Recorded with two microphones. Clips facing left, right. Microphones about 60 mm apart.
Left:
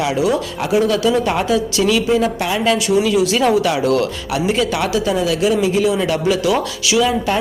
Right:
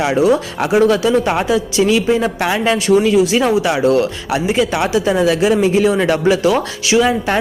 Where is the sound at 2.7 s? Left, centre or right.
Right.